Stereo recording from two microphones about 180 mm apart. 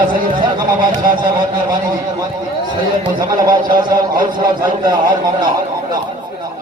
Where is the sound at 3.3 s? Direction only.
25° right (ahead or behind).